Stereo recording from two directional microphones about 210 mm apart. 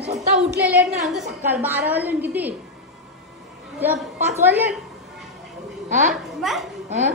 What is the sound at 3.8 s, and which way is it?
Speech, 10° right (ahead or behind).